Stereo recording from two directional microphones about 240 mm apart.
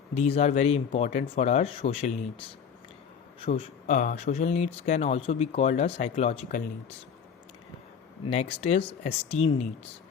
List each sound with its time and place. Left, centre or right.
0.1 s speech: left
3.4 s speech: left
8.3 s speech: left